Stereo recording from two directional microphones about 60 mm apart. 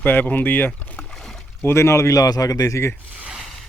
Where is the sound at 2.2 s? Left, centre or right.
Left.